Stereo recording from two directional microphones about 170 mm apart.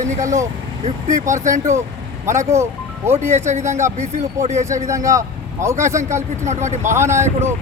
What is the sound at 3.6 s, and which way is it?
Speech, 15° right (ahead or behind).